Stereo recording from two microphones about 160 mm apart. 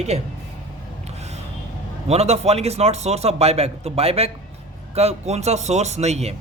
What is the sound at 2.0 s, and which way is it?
A man's voice, 40° right (ahead or behind).